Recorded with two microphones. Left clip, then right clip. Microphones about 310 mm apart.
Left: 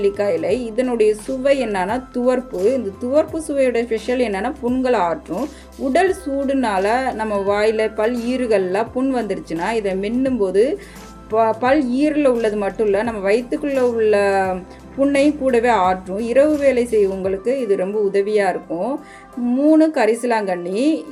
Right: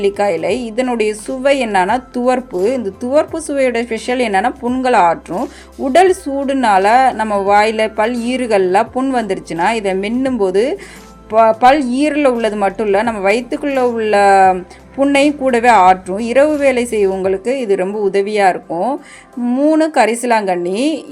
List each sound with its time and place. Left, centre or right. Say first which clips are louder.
0.0 s a woman's voice: right 4 dB; right